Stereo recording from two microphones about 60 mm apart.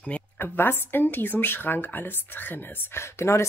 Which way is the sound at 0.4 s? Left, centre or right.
Left.